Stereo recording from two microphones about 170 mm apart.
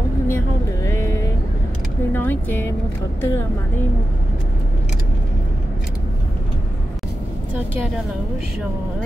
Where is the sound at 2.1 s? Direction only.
10° left (ahead or behind).